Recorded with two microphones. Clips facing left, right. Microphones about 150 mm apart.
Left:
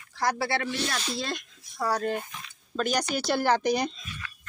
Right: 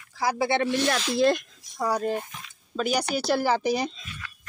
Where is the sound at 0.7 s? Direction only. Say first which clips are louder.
Right 6 dB; 60° right (ahead or behind).